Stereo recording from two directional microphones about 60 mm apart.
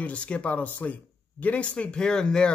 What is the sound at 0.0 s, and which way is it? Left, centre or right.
Speech, left.